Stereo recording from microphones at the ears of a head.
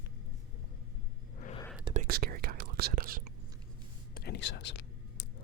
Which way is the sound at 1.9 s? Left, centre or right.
Right.